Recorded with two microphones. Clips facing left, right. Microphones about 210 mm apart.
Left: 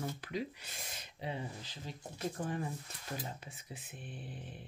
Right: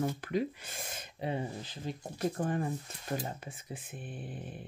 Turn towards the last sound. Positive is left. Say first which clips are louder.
# right 5 dB
turn(degrees=-50)  # may be behind; listen again after turning